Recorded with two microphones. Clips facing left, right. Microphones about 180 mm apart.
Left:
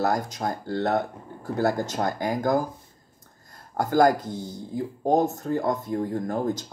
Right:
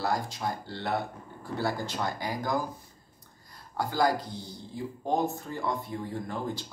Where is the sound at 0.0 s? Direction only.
45° left (ahead or behind).